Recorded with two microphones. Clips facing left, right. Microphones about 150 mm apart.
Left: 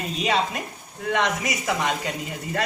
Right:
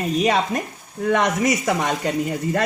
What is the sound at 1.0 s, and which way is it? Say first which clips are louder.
Speech: right 5 dB; 45° right (ahead or behind).